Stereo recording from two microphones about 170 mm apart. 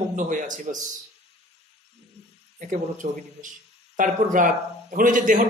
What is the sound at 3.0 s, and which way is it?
A man's voice, 45° right (ahead or behind).